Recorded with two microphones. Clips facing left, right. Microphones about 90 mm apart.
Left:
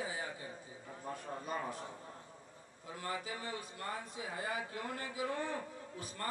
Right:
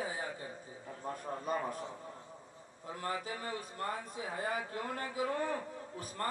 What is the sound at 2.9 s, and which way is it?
A man's voice, 40° right (ahead or behind).